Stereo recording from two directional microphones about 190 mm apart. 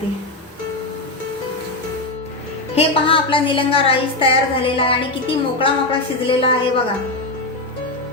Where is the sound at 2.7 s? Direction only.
30° left (ahead or behind).